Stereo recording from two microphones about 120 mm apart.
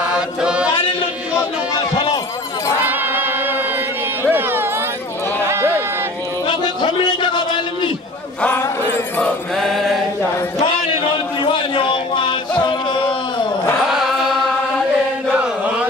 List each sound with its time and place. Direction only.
0.1 s chant: 10° right (ahead or behind)
2.8 s chant: 15° right (ahead or behind)
4.2 s a sound: 15° right (ahead or behind)
6.4 s a sound: 40° left (ahead or behind)
8.4 s a sound: 15° left (ahead or behind)
9.2 s mantra: centre (ahead or behind)
11.4 s music: 45° left (ahead or behind)
13.7 s chant: centre (ahead or behind)
15.3 s chant: 10° right (ahead or behind)